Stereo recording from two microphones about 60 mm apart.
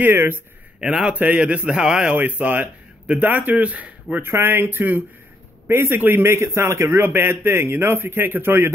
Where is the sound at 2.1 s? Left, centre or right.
Right.